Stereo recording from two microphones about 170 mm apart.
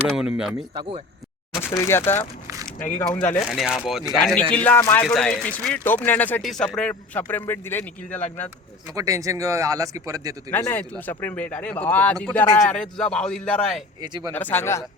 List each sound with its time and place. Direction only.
0.1 s a man's voice: 5° right (ahead or behind)
0.7 s speech: 30° right (ahead or behind)
1.8 s speech: 15° left (ahead or behind)
3.4 s a man's voice: centre (ahead or behind)
9.0 s speech: 20° right (ahead or behind)
10.5 s a man's voice: 10° left (ahead or behind)
14.0 s speech: 25° right (ahead or behind)
14.3 s speech: 10° left (ahead or behind)